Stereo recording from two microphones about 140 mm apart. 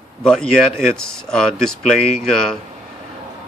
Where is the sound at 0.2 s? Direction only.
5° left (ahead or behind).